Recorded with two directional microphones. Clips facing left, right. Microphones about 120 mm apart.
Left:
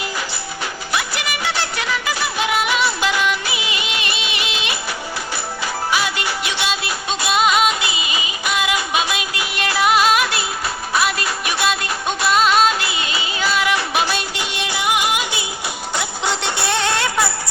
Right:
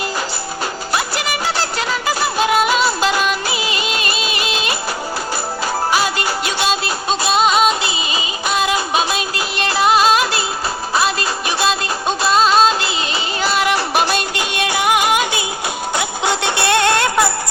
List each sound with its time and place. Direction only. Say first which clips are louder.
0.9 s music: right 3 dB; 40° right (ahead or behind)
5.9 s music: right 1 dB; 40° right (ahead or behind)